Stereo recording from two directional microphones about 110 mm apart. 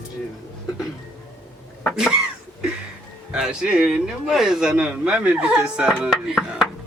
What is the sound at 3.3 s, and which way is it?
Speech, 5° right (ahead or behind).